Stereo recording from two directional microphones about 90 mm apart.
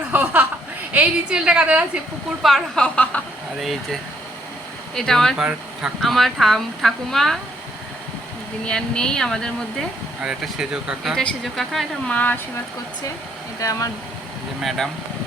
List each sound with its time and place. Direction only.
0.1 s a sound: 15° right (ahead or behind)
0.9 s a woman's voice: 10° right (ahead or behind)
2.4 s speech: centre (ahead or behind)
4.9 s speech: 5° left (ahead or behind)
5.4 s speech: 10° right (ahead or behind)
6.0 s speech: centre (ahead or behind)
8.6 s speech: 10° left (ahead or behind)
10.2 s a woman's voice: 10° right (ahead or behind)
11.1 s speech: 5° left (ahead or behind)
12.0 s speech: 15° left (ahead or behind)
13.6 s speech: 40° left (ahead or behind)
14.6 s speech: centre (ahead or behind)